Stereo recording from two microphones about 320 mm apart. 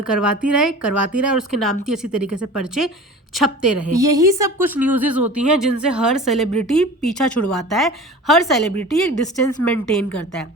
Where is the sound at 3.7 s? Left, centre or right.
Right.